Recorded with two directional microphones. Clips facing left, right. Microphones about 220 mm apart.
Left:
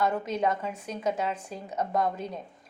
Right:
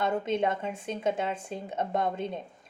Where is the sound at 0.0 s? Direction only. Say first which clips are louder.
Even; 25° right (ahead or behind).